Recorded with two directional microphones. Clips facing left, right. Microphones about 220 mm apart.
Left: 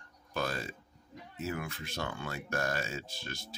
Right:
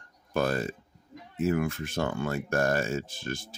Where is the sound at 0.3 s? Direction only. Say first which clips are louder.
Right 8 dB; 50° right (ahead or behind).